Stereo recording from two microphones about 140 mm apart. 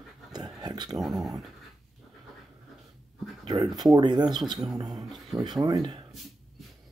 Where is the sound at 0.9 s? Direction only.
Centre (ahead or behind).